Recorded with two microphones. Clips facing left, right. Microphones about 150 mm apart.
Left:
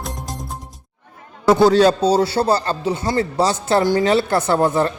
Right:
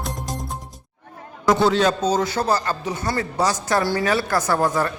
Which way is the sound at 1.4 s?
35° left (ahead or behind).